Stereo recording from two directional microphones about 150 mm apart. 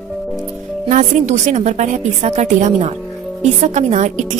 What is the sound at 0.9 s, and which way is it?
A woman's voice, 50° right (ahead or behind).